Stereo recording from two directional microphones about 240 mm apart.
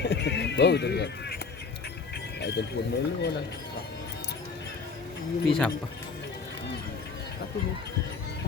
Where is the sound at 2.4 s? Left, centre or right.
Left.